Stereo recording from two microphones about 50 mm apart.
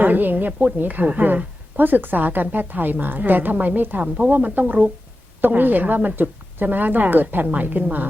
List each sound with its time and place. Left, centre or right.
0.0 s a woman's voice: right